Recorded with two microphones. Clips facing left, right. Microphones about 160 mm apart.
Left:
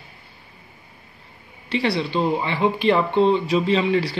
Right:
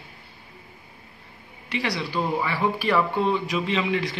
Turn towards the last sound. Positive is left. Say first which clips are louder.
# left 5 dB
turn(degrees=35)  # may be behind; listen again after turning